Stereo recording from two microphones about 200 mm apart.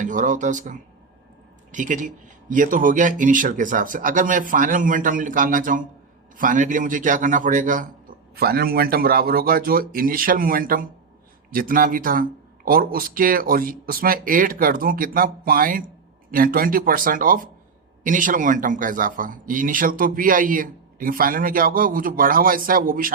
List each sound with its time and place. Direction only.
0.0 s a man's voice: 40° right (ahead or behind)